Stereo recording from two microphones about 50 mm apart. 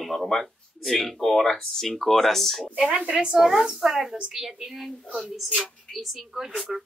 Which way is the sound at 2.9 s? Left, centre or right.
Right.